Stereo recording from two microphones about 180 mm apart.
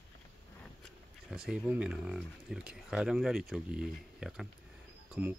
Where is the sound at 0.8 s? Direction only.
Centre (ahead or behind).